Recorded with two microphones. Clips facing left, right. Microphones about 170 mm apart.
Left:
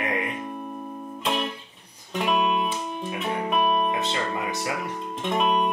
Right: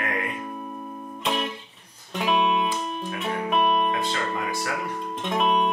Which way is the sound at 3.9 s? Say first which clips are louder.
Even; 20° left (ahead or behind).